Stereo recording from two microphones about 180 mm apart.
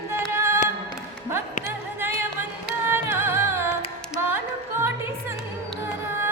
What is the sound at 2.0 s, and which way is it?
Music, 15° right (ahead or behind).